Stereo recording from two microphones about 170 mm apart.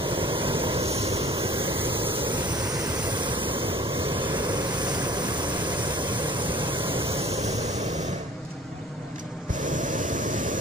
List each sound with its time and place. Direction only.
0.2 s vehicle: 30° right (ahead or behind)